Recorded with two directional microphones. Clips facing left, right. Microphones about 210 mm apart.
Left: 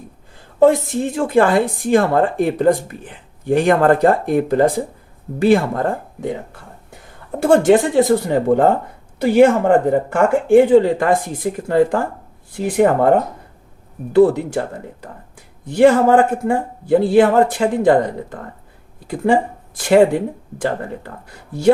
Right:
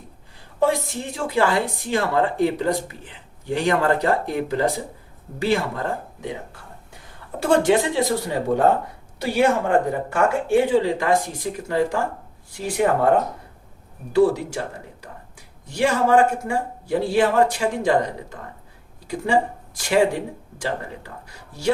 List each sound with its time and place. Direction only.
0.6 s speech: 55° left (ahead or behind)
7.3 s a man's voice: 50° left (ahead or behind)
14.1 s a man's voice: 55° left (ahead or behind)
15.6 s a man's voice: 55° left (ahead or behind)